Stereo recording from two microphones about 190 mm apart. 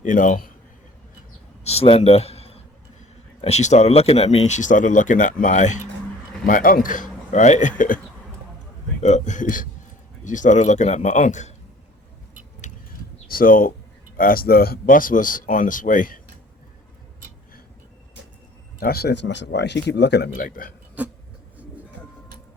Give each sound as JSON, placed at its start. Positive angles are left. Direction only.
{"t": 0.0, "sound": "a man's voice", "side_deg": 40}
{"t": 1.6, "sound": "a man's voice", "side_deg": 30}
{"t": 9.0, "sound": "speech", "side_deg": 40}
{"t": 13.2, "sound": "speech", "side_deg": 50}
{"t": 18.8, "sound": "speech", "side_deg": 55}
{"t": 21.0, "sound": "a sound", "side_deg": -10}